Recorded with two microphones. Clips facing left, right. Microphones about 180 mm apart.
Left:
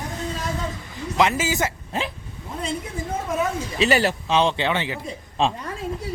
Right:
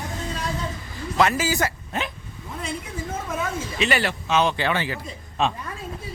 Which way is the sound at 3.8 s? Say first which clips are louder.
Left 4 dB; 40° left (ahead or behind).